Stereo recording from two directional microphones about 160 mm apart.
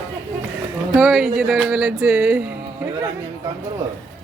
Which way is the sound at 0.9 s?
5° right (ahead or behind).